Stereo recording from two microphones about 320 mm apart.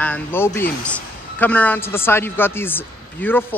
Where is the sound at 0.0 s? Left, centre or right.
Centre.